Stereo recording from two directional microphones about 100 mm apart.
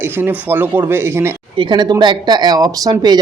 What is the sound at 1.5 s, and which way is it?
Speech, 50° right (ahead or behind).